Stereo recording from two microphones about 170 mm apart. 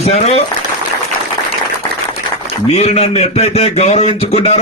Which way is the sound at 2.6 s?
40° left (ahead or behind).